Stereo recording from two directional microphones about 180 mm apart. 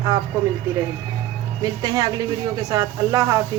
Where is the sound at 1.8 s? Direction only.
20° right (ahead or behind).